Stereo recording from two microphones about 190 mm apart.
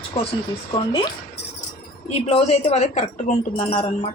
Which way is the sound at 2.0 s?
35° left (ahead or behind).